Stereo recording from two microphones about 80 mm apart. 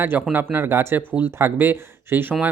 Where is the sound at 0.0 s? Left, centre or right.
Right.